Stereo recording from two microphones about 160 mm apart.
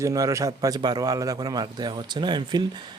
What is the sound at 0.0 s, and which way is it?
Speech, 20° right (ahead or behind).